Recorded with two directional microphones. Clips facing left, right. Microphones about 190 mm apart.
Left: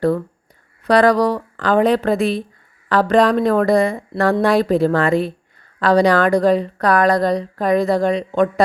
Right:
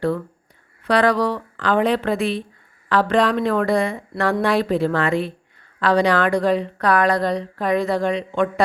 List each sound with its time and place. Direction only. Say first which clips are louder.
0.9 s a woman's voice: left 4 dB; 40° left (ahead or behind)